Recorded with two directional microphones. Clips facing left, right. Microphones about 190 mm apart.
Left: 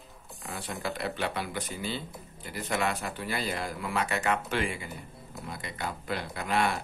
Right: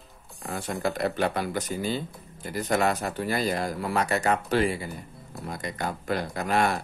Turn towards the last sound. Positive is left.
turn(degrees=-45)  # may be behind; listen again after turning